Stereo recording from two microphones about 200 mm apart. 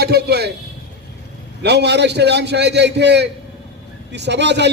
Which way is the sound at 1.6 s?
60° right (ahead or behind).